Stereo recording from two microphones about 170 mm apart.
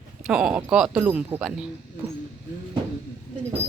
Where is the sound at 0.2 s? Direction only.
5° right (ahead or behind).